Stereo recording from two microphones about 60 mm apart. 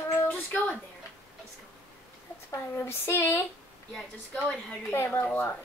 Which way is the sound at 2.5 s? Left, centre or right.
Left.